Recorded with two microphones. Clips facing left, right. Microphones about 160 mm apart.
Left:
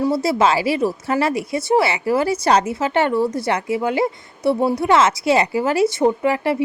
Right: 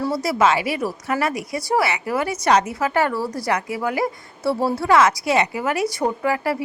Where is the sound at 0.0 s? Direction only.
25° left (ahead or behind).